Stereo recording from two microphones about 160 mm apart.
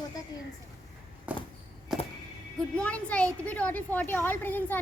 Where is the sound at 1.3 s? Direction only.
10° right (ahead or behind).